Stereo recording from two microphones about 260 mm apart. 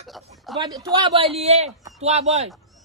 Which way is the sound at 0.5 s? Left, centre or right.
Centre.